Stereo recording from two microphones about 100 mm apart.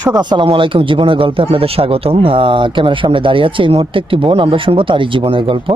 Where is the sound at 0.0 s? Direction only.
45° right (ahead or behind).